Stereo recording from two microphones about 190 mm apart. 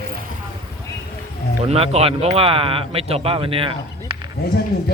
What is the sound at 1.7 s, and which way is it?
Speech, 30° right (ahead or behind).